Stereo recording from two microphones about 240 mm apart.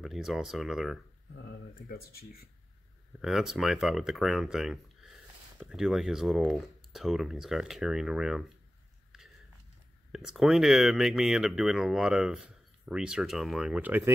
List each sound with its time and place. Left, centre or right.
0.0 s speech: centre
1.3 s speech: left
3.2 s speech: centre
10.1 s speech: centre